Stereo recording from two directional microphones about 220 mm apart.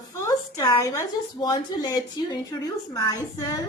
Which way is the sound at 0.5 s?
15° left (ahead or behind).